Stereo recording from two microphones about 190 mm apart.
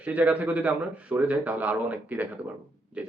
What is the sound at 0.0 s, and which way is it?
A man's voice, 5° right (ahead or behind).